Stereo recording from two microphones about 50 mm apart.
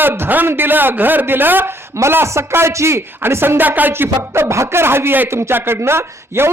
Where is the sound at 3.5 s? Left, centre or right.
Right.